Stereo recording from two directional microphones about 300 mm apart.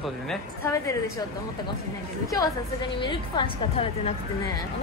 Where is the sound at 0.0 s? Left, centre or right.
Centre.